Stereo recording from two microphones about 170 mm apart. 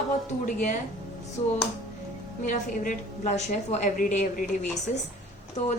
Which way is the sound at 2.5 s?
50° left (ahead or behind).